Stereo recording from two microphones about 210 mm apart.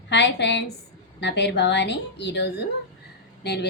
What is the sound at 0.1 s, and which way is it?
A woman's voice, 55° left (ahead or behind).